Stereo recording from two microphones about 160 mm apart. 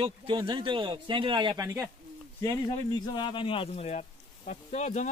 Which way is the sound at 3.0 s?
30° left (ahead or behind).